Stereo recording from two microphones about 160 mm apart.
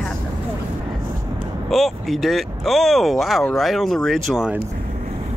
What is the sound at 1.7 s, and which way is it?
Speech, centre (ahead or behind).